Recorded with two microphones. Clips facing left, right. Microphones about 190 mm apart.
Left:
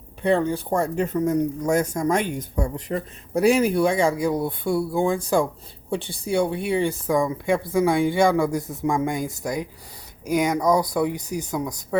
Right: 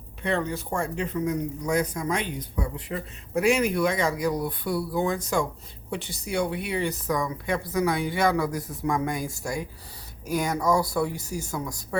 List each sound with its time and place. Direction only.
0.2 s speech: 30° left (ahead or behind)